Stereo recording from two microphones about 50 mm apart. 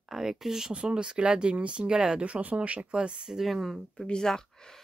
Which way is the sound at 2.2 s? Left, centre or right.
Right.